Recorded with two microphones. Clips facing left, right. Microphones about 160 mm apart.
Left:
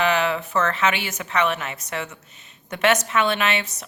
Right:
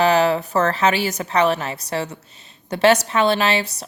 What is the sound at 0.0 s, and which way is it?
A woman's voice, 35° right (ahead or behind).